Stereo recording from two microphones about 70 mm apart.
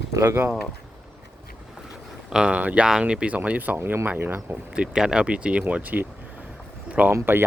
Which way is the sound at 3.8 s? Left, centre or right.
Right.